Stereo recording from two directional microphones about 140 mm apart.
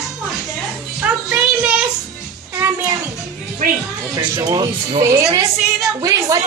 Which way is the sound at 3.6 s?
60° right (ahead or behind).